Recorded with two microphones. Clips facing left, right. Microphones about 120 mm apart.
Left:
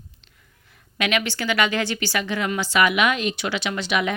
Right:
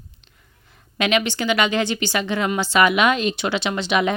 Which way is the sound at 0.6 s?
25° right (ahead or behind).